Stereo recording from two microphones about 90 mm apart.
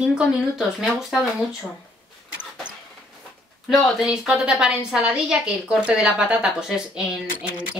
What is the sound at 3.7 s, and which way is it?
A woman's voice, centre (ahead or behind).